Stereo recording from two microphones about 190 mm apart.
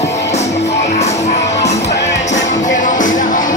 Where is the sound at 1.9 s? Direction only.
70° left (ahead or behind).